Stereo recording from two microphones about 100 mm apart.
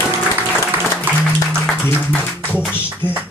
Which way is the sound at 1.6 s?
15° left (ahead or behind).